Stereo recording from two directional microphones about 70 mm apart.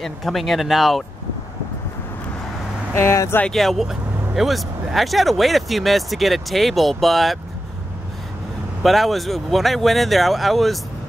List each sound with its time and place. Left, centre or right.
0.0 s speech: centre
2.9 s speech: left
3.5 s speech: centre
8.8 s speech: centre